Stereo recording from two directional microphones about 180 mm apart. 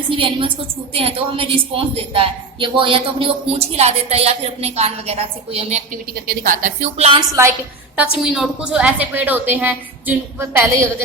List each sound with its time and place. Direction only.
0.1 s a woman's voice: 30° right (ahead or behind)
5.9 s a woman's voice: 50° right (ahead or behind)
7.2 s a woman's voice: 15° right (ahead or behind)
8.2 s a woman's voice: 5° right (ahead or behind)